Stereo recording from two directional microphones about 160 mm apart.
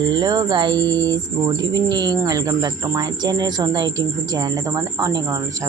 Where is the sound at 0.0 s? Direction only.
25° right (ahead or behind).